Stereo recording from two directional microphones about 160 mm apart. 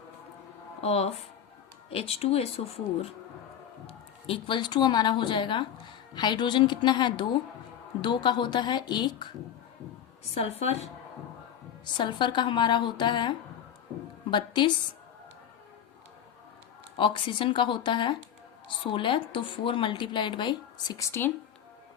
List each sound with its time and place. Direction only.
0.8 s speech: 40° left (ahead or behind)
10.3 s speech: 40° left (ahead or behind)
11.9 s a woman's voice: 30° left (ahead or behind)
17.0 s speech: 35° left (ahead or behind); by 21.3 s 15° left (ahead or behind)